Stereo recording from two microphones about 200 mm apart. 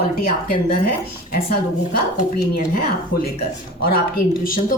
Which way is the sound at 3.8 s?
50° left (ahead or behind).